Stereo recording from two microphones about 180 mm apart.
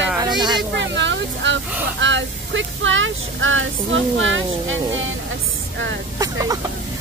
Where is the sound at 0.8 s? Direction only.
85° right.